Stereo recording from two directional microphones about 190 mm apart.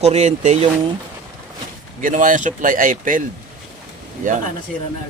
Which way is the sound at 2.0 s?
45° right (ahead or behind).